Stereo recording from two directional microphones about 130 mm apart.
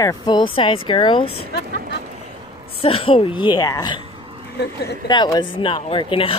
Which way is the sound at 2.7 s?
45° left (ahead or behind).